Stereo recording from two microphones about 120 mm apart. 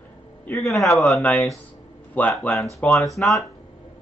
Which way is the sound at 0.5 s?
25° left (ahead or behind).